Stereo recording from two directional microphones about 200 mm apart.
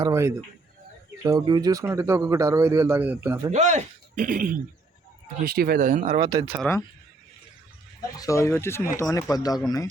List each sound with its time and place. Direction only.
0.0 s speech: 15° right (ahead or behind)
3.5 s speech: 35° right (ahead or behind)
6.1 s speech: 25° right (ahead or behind)
6.7 s speech: 5° left (ahead or behind)
8.1 s speech: 15° left (ahead or behind)